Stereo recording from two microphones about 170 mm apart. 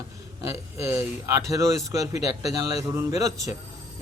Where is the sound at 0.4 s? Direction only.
15° right (ahead or behind).